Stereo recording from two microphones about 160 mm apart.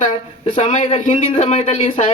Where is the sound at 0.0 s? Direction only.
55° left (ahead or behind).